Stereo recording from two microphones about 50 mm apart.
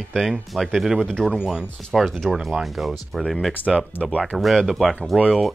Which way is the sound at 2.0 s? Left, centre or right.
Centre.